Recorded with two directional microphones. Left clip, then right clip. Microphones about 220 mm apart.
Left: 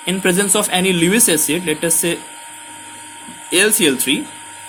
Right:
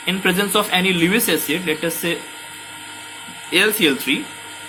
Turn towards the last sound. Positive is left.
turn(degrees=35)  # may be behind; listen again after turning